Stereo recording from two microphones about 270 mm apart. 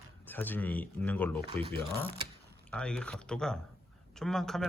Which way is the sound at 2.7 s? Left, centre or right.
Centre.